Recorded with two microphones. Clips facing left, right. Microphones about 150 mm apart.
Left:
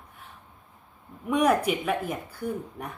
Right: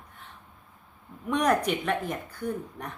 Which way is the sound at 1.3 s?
5° left (ahead or behind).